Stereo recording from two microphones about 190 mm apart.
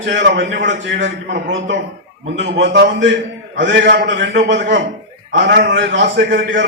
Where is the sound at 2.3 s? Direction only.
70° right (ahead or behind).